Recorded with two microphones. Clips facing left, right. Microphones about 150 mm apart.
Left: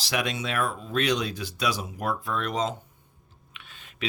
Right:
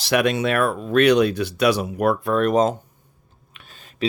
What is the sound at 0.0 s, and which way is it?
Speech, 65° right (ahead or behind).